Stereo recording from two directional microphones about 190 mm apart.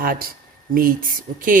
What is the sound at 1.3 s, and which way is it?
Speech, 40° right (ahead or behind).